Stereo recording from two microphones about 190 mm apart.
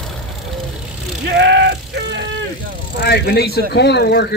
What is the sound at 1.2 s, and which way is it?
Music, 65° right (ahead or behind).